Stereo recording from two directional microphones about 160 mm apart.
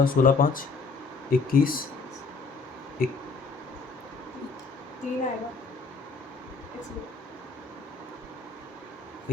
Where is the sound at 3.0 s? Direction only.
65° left (ahead or behind).